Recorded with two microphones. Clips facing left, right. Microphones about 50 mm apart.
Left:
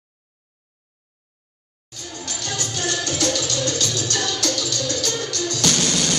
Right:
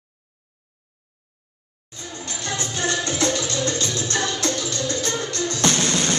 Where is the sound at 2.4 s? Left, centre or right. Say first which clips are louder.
Right 2 dB; right.